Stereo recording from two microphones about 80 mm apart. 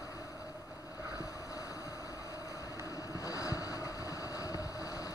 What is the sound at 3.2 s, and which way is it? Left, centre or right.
Vehicle, left.